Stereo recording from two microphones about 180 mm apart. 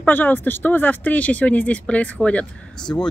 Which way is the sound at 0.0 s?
10° left (ahead or behind).